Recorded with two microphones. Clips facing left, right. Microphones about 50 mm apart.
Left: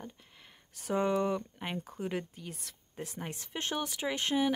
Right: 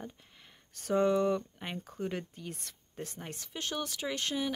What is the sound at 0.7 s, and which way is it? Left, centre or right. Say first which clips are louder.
Speech: right 2 dB; centre.